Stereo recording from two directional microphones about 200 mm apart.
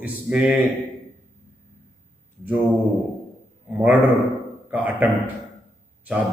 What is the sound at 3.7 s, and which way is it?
A man's voice, 10° right (ahead or behind).